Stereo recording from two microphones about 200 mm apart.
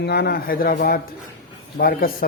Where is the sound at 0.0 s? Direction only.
55° left (ahead or behind).